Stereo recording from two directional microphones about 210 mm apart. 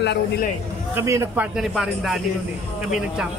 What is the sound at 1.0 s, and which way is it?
Speech, 10° right (ahead or behind).